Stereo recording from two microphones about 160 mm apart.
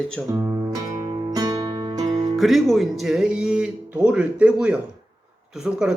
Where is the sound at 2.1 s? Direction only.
35° right (ahead or behind).